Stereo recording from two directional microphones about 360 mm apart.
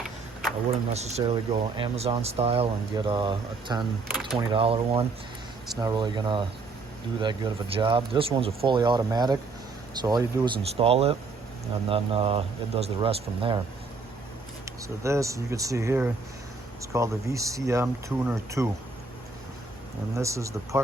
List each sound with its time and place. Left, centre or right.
0.9 s speech: centre
14.6 s speech: centre
20.1 s speech: centre